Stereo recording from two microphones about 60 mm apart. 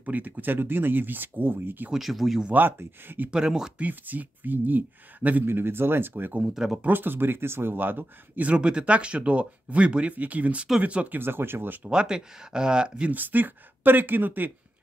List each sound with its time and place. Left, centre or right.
0.0 s speech: right
1.9 s speech: centre
2.5 s speech: right
3.3 s speech: centre
3.7 s speech: right
6.5 s speech: centre
6.8 s speech: right
8.5 s speech: centre
11.1 s speech: right
11.9 s speech: centre
13.1 s speech: right